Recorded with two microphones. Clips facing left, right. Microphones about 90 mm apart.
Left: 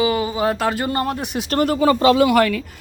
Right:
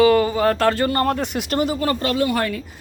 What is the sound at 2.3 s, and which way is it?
Speech, 90° left.